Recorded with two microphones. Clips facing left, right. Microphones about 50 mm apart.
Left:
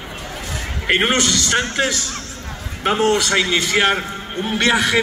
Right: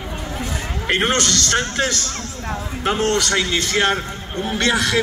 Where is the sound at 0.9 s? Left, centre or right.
Centre.